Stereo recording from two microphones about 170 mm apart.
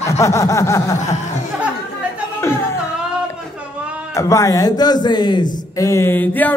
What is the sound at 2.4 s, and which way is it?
Music, 15° left (ahead or behind).